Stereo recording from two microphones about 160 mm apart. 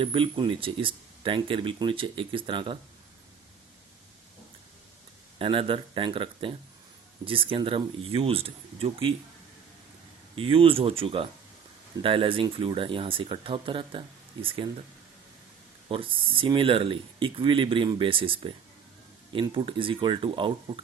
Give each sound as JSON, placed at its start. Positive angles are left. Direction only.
{"t": 0.0, "sound": "speech", "side_deg": -30}
{"t": 5.4, "sound": "speech", "side_deg": -35}
{"t": 10.3, "sound": "speech", "side_deg": -35}
{"t": 15.9, "sound": "speech", "side_deg": -35}